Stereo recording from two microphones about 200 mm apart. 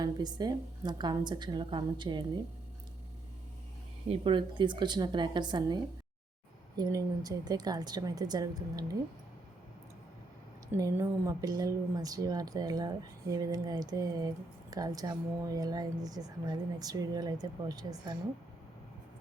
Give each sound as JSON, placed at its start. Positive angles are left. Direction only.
{"t": 0.0, "sound": "speech", "side_deg": -20}
{"t": 4.1, "sound": "speech", "side_deg": -25}
{"t": 10.7, "sound": "speech", "side_deg": -15}